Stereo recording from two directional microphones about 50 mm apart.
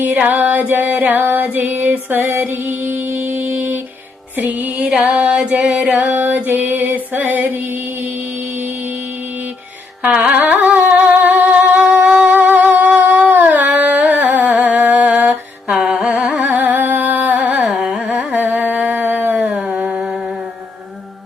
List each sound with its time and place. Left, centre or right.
0.0 s music: right
4.9 s music: centre
6.1 s music: right
10.1 s carnatic music: right
10.3 s music: right
15.8 s carnatic music: centre
16.4 s carnatic music: right
17.7 s carnatic music: centre
18.3 s a sound: right
19.5 s a sound: centre